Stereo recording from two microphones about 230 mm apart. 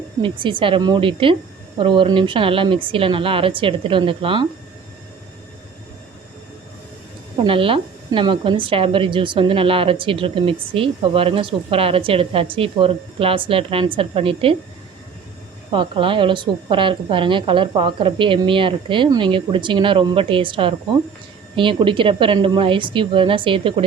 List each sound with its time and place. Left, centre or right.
0.2 s speech: right
7.4 s speech: right
15.7 s speech: right